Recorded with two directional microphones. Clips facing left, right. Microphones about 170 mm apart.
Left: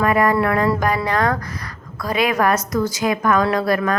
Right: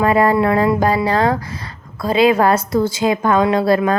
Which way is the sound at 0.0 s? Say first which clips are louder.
Right 3 dB; 30° right (ahead or behind).